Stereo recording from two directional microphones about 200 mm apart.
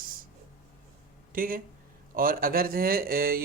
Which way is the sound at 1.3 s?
45° right (ahead or behind).